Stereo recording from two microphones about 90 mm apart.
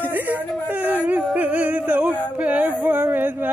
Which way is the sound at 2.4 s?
15° right (ahead or behind).